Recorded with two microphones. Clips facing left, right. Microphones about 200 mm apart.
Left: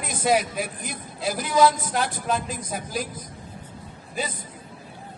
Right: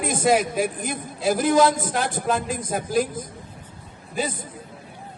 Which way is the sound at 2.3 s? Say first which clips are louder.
Right 5 dB; centre (ahead or behind).